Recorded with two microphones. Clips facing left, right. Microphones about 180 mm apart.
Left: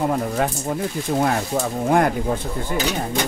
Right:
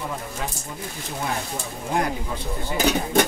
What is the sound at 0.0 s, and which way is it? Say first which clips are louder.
Speech: left 10 dB; 55° left (ahead or behind).